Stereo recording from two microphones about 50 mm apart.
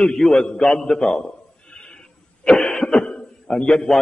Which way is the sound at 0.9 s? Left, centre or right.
Centre.